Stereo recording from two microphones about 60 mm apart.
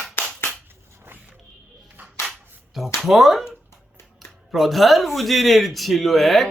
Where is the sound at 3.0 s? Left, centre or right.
Centre.